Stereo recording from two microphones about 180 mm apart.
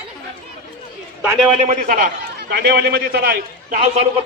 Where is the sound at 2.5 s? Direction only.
65° right (ahead or behind).